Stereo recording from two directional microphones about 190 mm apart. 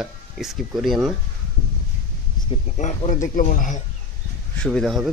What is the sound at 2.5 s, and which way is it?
Speech, 35° left (ahead or behind).